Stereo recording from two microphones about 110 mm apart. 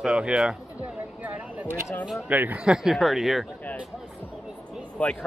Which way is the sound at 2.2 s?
15° right (ahead or behind).